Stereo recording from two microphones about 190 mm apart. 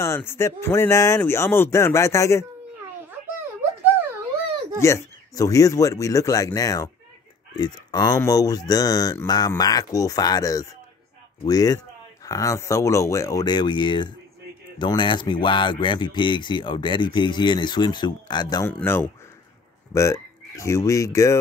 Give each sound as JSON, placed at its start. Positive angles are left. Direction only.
{"t": 0.0, "sound": "speech", "side_deg": 15}
{"t": 4.7, "sound": "speech", "side_deg": 15}
{"t": 18.7, "sound": "speech", "side_deg": 10}